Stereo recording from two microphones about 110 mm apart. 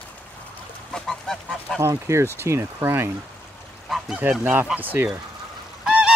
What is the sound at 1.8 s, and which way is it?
Speech, 25° right (ahead or behind).